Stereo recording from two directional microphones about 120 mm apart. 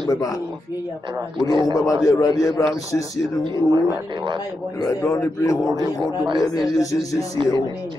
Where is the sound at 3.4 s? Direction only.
40° right (ahead or behind).